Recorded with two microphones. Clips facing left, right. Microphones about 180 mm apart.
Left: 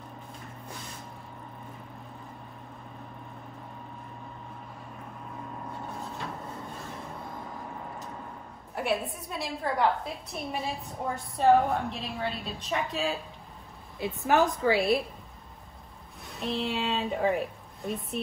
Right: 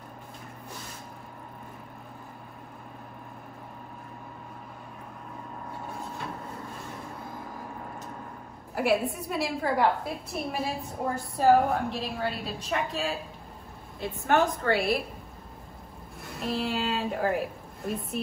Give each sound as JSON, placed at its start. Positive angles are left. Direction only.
{"t": 8.7, "sound": "a woman's voice", "side_deg": 0}
{"t": 16.3, "sound": "a woman's voice", "side_deg": 0}